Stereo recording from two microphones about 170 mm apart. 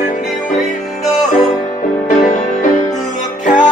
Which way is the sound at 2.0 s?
45° left (ahead or behind).